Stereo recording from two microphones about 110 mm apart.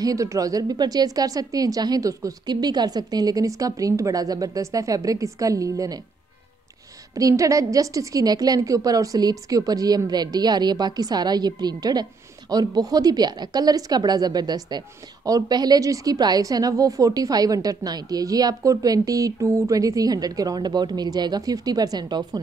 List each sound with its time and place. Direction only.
0.0 s a woman's voice: 30° right (ahead or behind)
7.2 s a woman's voice: 30° right (ahead or behind)